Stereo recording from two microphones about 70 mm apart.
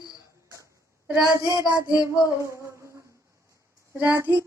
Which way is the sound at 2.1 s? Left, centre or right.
Right.